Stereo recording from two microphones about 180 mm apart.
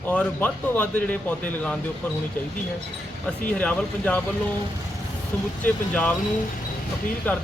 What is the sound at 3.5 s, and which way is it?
Speech, 5° left (ahead or behind).